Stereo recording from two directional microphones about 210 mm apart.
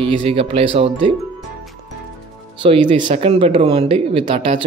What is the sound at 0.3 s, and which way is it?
Speech, 25° right (ahead or behind).